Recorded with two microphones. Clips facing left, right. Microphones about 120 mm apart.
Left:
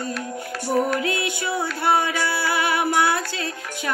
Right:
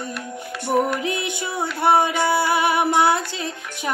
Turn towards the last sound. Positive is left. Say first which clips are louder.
# right 3 dB
turn(degrees=-20)  # may be behind; listen again after turning